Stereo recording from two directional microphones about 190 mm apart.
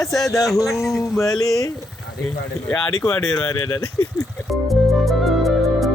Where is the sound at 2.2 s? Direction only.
5° left (ahead or behind).